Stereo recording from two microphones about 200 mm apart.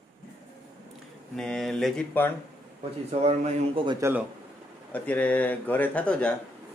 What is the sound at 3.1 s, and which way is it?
Speech, 30° right (ahead or behind).